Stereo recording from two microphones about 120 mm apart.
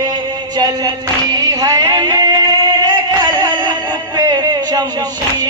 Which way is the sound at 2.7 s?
40° right (ahead or behind).